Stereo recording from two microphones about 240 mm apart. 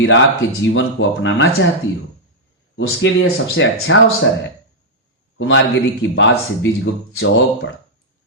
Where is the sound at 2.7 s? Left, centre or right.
Left.